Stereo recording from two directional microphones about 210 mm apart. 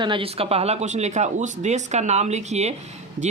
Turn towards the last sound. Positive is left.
turn(degrees=-35)  # may be behind; listen again after turning